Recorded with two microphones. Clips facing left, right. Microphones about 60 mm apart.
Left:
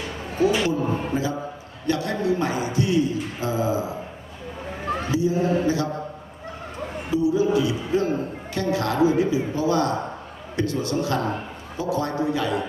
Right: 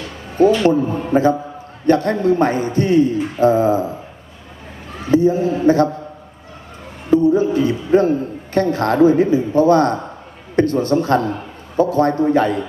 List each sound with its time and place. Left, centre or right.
0.6 s a man's voice: right
5.1 s a man's voice: right
7.1 s a man's voice: right